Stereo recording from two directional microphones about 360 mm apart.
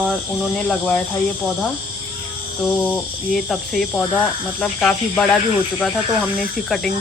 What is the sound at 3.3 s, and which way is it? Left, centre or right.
Speech, centre.